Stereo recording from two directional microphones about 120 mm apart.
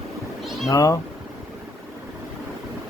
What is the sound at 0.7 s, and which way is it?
Speech, 30° left (ahead or behind).